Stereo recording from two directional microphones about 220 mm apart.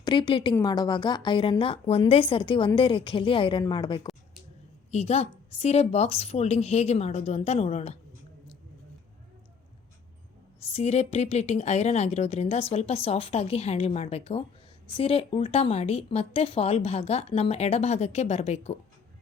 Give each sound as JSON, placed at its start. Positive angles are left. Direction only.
{"t": 0.0, "sound": "a woman's voice", "side_deg": 20}
{"t": 10.7, "sound": "a woman's voice", "side_deg": 30}